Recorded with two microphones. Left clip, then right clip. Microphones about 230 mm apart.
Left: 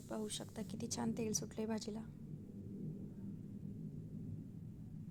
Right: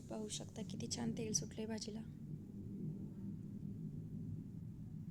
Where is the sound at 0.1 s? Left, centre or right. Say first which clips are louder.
Left 2 dB; centre.